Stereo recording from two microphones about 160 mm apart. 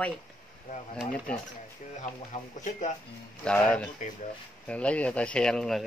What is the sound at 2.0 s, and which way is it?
Speech, 50° left (ahead or behind).